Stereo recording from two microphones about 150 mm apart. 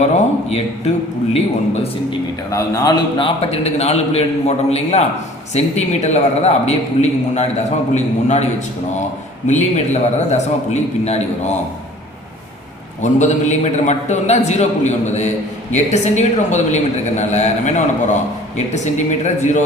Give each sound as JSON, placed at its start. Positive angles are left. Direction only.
{"t": 0.5, "sound": "a man's voice", "side_deg": 45}
{"t": 2.5, "sound": "a man's voice", "side_deg": 20}
{"t": 9.5, "sound": "a man's voice", "side_deg": 50}
{"t": 13.0, "sound": "a man's voice", "side_deg": 50}